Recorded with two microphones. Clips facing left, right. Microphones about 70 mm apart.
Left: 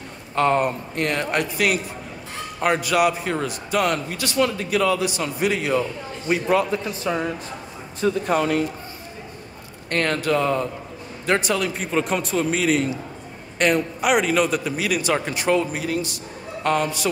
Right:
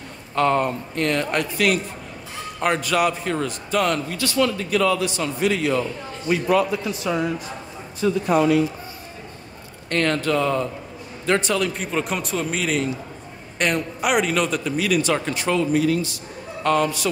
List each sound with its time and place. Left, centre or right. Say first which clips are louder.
0.4 s a man's voice: even; centre
2.6 s a man's voice: left 1 dB; centre
6.2 s speech: right 1 dB; left
8.0 s speech: right 2 dB; left
9.8 s a man's voice: right 1 dB; centre